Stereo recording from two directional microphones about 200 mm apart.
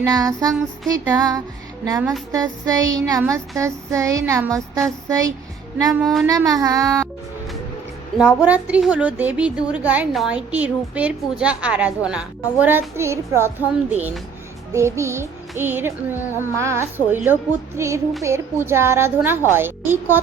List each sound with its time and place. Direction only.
0.0 s a woman's voice: 15° right (ahead or behind)
6.0 s a child's voice: centre (ahead or behind)
6.2 s a woman's voice: 15° right (ahead or behind)
8.2 s a woman's voice: 5° right (ahead or behind)